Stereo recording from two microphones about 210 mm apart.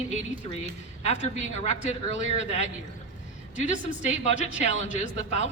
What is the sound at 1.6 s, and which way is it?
A woman's voice, 30° left (ahead or behind).